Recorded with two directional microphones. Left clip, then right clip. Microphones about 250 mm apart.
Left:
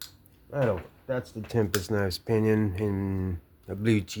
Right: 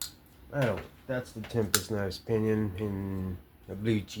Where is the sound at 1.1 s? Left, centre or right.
Left.